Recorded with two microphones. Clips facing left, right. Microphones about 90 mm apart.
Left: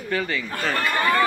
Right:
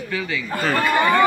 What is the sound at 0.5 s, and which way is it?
Speech, 5° right (ahead or behind).